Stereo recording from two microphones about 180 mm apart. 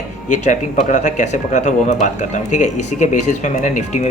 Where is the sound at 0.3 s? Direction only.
45° left (ahead or behind).